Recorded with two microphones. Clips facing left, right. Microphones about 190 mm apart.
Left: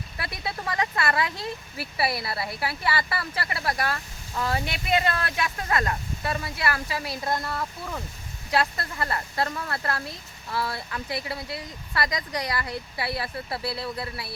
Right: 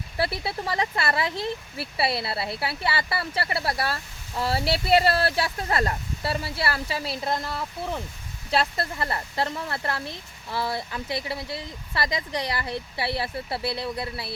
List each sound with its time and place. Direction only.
0.2 s speech: 30° right (ahead or behind)